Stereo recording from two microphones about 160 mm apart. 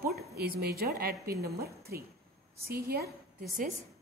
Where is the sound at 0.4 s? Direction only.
75° right (ahead or behind).